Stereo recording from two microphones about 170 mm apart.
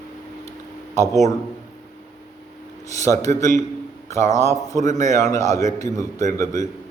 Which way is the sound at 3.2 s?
20° left (ahead or behind).